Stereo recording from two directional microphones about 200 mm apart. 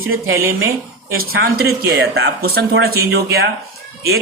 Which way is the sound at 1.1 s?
50° right (ahead or behind).